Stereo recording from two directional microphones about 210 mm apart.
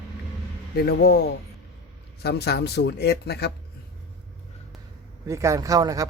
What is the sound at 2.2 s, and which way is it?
Speech, 50° left (ahead or behind).